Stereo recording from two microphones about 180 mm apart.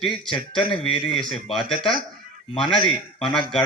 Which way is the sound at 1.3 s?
Centre (ahead or behind).